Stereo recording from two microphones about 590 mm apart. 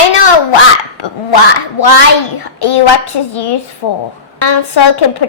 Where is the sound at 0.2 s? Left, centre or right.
Left.